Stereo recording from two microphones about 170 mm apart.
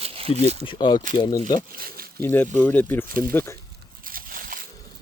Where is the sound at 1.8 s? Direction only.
60° right (ahead or behind).